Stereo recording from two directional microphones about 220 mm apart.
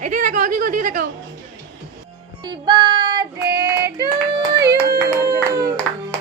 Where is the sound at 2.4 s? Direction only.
20° right (ahead or behind).